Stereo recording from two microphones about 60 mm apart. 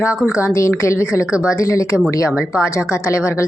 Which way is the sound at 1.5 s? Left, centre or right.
Left.